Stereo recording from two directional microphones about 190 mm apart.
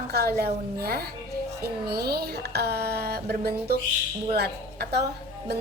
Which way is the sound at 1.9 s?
55° right (ahead or behind).